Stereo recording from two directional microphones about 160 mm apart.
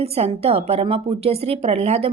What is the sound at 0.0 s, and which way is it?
A woman's voice, 40° right (ahead or behind).